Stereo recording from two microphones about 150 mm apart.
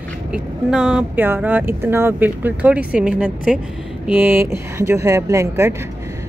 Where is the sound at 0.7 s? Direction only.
5° right (ahead or behind).